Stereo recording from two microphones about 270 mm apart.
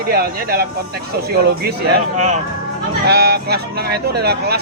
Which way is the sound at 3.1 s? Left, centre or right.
Right.